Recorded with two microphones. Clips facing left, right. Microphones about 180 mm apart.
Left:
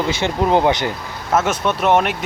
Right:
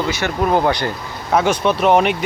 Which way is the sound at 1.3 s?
Centre (ahead or behind).